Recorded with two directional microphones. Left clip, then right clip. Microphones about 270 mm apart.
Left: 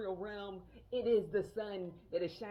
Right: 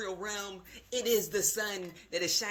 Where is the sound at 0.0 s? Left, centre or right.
Right.